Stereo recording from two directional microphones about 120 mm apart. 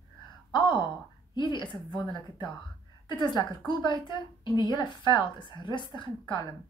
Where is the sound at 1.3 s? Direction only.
40° left (ahead or behind).